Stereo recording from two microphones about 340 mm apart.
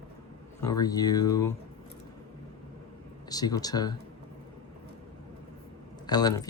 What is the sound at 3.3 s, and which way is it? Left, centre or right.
Speech, centre.